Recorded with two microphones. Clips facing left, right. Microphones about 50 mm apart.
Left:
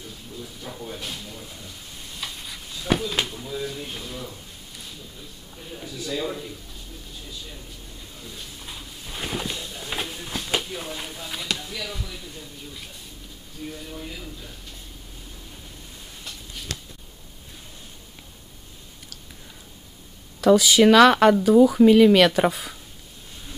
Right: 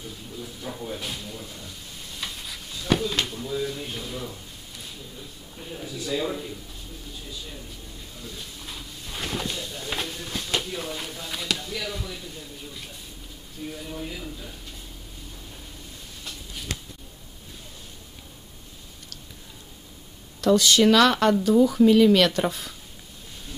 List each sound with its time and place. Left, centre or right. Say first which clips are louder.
0.4 s speech: right 2 dB; centre
5.6 s speech: right 1 dB; centre
8.2 s a sound: right 1 dB; centre
13.7 s speech: right 2 dB; centre
16.7 s a sound: right 1 dB; right
20.3 s speech: left 3 dB; centre